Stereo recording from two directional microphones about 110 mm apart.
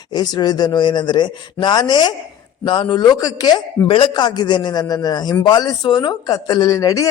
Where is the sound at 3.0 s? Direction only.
35° left (ahead or behind).